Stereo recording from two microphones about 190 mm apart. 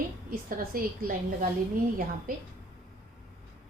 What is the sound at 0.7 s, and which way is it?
Speech, 50° right (ahead or behind).